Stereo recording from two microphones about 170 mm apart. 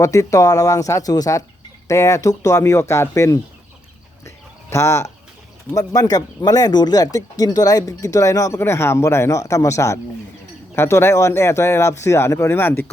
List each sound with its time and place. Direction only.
0.0 s speech: 20° left (ahead or behind)
4.7 s speech: 15° left (ahead or behind)